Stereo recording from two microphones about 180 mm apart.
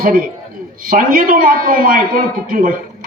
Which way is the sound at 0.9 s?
50° right (ahead or behind).